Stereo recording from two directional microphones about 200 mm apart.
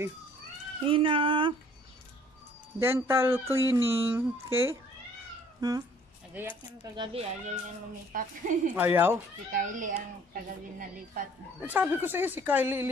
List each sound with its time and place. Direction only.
0.8 s speech: 25° right (ahead or behind)
2.8 s speech: 10° right (ahead or behind)
7.0 s speech: 30° right (ahead or behind)
8.1 s a woman's voice: 45° right (ahead or behind)
8.7 s speech: 10° right (ahead or behind)
9.5 s speech: 40° right (ahead or behind)
11.6 s speech: 10° right (ahead or behind)